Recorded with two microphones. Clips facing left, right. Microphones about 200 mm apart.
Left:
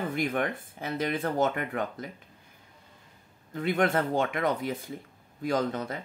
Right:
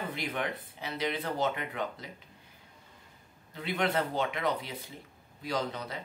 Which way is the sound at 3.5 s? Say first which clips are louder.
Left 5 dB; 50° left (ahead or behind).